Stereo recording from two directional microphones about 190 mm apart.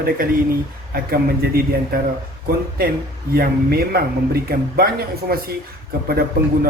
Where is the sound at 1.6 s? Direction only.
50° right (ahead or behind).